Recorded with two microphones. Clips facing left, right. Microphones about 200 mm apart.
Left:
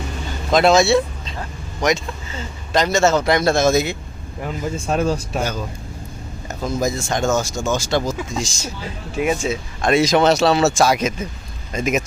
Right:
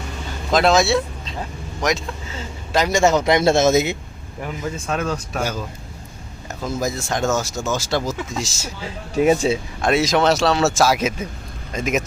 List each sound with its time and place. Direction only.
0.5 s a man's voice: centre (ahead or behind); by 3.9 s 20° right (ahead or behind)
4.9 s speech: 35° left (ahead or behind)
5.4 s a man's voice: 10° right (ahead or behind)
9.1 s speech: 35° right (ahead or behind)
9.8 s speech: centre (ahead or behind)